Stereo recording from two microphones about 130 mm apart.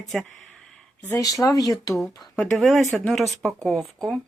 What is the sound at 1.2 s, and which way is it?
Speech, 30° left (ahead or behind).